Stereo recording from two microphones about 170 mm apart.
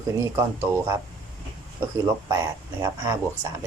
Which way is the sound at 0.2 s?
15° right (ahead or behind).